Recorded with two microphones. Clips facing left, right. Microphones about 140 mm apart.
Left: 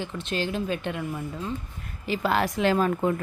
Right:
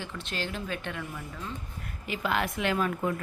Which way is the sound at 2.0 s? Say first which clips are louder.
Left 5 dB; 35° left (ahead or behind).